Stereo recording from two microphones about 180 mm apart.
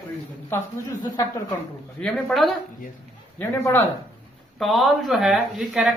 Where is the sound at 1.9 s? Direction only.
5° left (ahead or behind).